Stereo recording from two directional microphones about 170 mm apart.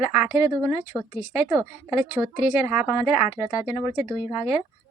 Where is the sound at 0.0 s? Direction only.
10° right (ahead or behind).